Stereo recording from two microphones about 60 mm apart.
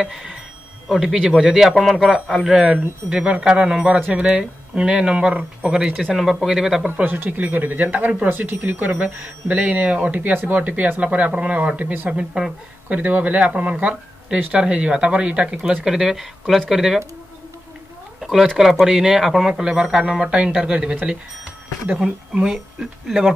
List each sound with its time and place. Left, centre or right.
0.0 s a sound: centre
0.8 s speech: centre
7.2 s speech: right
12.1 s speech: centre
12.8 s speech: right
15.8 s speech: centre
18.2 s a sound: centre
18.6 s speech: centre
20.9 s speech: right
21.9 s speech: centre